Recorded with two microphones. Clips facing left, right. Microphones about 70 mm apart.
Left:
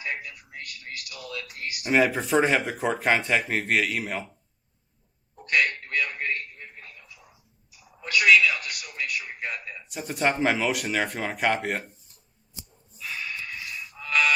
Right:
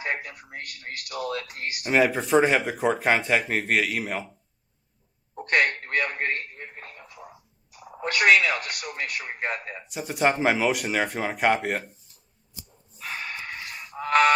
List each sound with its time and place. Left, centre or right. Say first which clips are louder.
0.0 s speech: right 3 dB; right
1.8 s speech: even; centre
5.4 s a sound: right 2 dB; right
6.6 s telephone: right 4 dB; right
9.8 s speech: right 2 dB; centre
13.0 s music: right 1 dB; right